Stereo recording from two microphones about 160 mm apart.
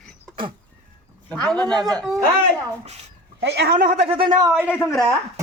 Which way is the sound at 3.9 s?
35° right (ahead or behind).